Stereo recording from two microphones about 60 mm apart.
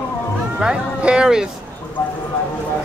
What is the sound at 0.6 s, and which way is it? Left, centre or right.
Speech, centre.